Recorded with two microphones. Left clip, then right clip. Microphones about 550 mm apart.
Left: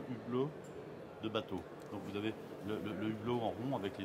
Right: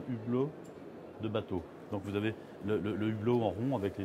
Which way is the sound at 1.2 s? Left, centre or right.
Right.